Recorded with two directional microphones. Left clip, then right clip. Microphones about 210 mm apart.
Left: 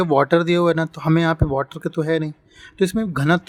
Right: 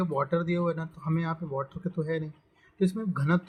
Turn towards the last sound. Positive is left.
turn(degrees=50)  # may be behind; listen again after turning